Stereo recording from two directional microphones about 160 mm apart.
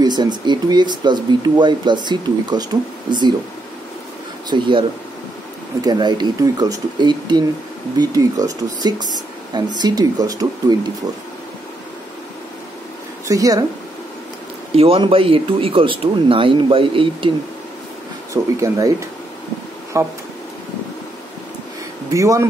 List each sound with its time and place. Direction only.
0.0 s speech: 25° right (ahead or behind)
4.5 s speech: 30° right (ahead or behind)
13.3 s speech: 20° right (ahead or behind)
14.8 s speech: 35° right (ahead or behind)
18.3 s speech: 20° right (ahead or behind)
22.1 s speech: 20° right (ahead or behind)